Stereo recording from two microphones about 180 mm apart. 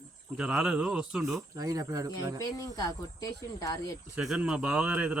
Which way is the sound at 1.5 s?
20° right (ahead or behind).